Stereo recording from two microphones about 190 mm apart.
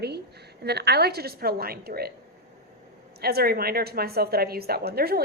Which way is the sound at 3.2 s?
55° right (ahead or behind).